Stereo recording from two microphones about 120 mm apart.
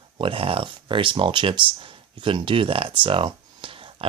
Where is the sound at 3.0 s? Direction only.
45° right (ahead or behind).